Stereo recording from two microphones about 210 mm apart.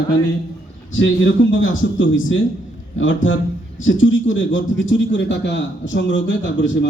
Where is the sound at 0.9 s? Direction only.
65° left (ahead or behind).